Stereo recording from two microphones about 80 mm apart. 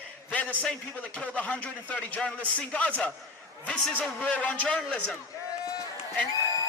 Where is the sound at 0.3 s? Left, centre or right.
Centre.